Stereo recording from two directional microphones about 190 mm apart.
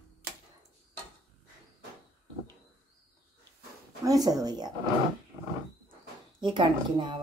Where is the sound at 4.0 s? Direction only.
20° right (ahead or behind).